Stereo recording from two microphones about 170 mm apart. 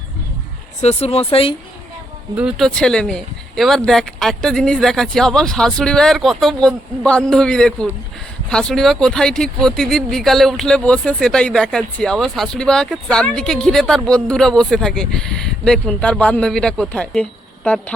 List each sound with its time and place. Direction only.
0.8 s speech: 40° left (ahead or behind)
2.3 s speech: 5° right (ahead or behind)